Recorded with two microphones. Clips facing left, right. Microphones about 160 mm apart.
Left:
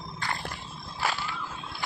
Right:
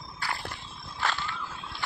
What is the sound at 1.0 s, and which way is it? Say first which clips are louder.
Whip: left 1 dB; 10° left (ahead or behind).